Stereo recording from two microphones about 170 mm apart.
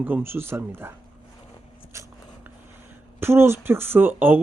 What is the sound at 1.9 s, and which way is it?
Biting, 15° right (ahead or behind).